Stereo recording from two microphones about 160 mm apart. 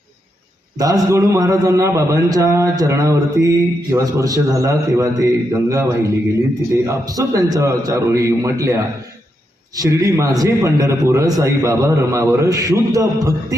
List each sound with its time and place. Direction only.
0.8 s a man's voice: 20° right (ahead or behind)